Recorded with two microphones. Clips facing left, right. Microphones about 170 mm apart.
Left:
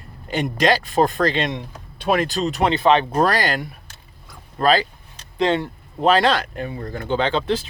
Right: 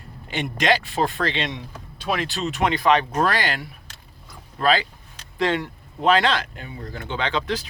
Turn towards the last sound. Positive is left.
turn(degrees=30)  # may be behind; listen again after turning